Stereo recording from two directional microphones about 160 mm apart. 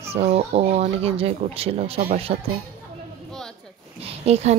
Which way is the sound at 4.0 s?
40° right (ahead or behind).